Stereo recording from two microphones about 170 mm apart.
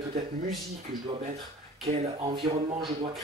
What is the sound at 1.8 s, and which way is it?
Speech, 35° right (ahead or behind).